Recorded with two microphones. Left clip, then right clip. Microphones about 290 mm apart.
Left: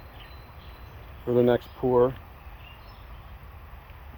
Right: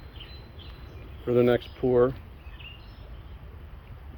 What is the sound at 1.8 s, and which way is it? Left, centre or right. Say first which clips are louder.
Speech: left 1 dB; centre.